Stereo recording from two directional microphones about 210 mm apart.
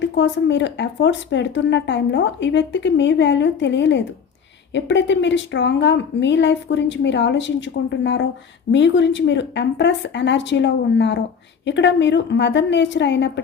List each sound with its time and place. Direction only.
0.0 s speech: 60° left (ahead or behind)